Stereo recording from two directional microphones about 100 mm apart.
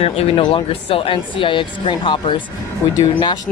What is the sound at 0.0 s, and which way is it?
Speech, 70° left (ahead or behind).